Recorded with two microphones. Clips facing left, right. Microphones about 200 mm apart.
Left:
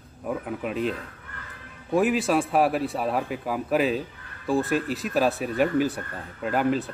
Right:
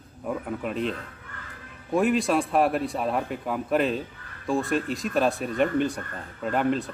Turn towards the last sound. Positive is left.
turn(degrees=5)  # may be behind; listen again after turning